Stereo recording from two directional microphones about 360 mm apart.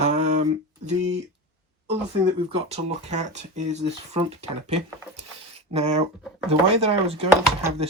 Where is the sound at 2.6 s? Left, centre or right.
Centre.